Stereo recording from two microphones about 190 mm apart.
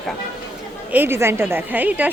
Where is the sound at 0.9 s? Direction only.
10° right (ahead or behind).